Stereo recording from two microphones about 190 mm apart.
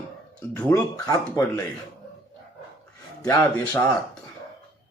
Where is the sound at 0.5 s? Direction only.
10° left (ahead or behind).